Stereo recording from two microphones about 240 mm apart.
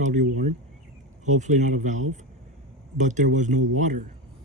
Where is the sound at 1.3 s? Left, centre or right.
Right.